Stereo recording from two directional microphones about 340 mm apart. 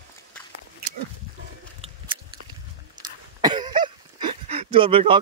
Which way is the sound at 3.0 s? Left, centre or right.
Centre.